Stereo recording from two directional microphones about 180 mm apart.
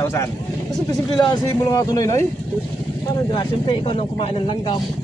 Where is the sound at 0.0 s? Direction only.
15° left (ahead or behind).